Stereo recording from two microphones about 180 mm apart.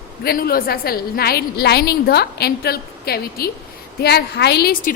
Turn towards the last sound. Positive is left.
turn(degrees=60)  # may be behind; listen again after turning